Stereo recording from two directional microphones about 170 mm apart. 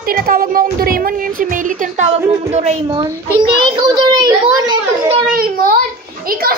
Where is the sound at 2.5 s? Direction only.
40° right (ahead or behind).